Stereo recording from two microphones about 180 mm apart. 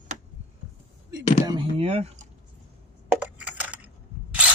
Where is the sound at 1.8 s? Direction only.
35° right (ahead or behind).